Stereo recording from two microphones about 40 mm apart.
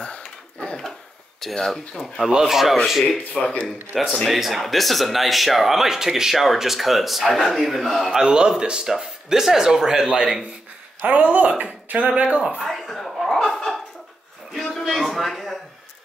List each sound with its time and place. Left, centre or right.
0.0 s a sound: left
1.4 s speech: centre
2.4 s speech: centre
8.3 s speech: centre
11.0 s speech: right
12.6 s chuckle: centre
14.5 s a sound: centre